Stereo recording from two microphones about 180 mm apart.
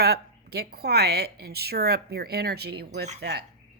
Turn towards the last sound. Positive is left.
turn(degrees=-65)  # may be behind; listen again after turning